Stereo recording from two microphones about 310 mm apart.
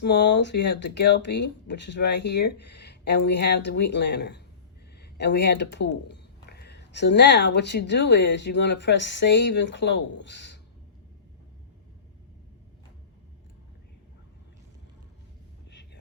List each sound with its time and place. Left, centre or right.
0.0 s speech: left